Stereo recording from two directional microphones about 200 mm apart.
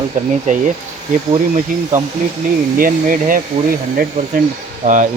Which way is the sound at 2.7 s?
45° right (ahead or behind).